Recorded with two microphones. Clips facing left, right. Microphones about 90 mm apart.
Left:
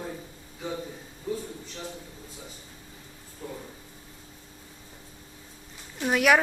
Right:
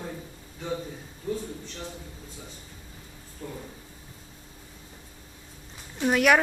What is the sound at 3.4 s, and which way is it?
Speech, 5° left (ahead or behind).